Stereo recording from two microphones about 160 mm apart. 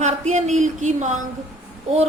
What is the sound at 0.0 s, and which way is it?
A woman's voice, 45° right (ahead or behind).